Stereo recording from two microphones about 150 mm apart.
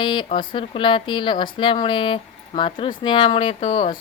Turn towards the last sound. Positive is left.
turn(degrees=35)  # may be behind; listen again after turning